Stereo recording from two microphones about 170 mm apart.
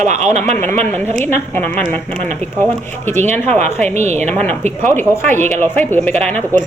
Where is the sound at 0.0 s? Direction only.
45° right (ahead or behind).